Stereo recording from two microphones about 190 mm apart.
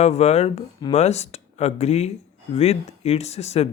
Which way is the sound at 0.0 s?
35° left (ahead or behind).